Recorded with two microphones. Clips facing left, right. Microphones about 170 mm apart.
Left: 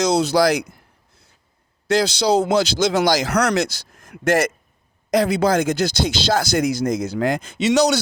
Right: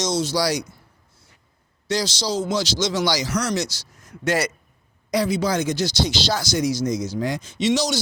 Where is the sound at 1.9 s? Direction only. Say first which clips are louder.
Left 7 dB; 60° left (ahead or behind).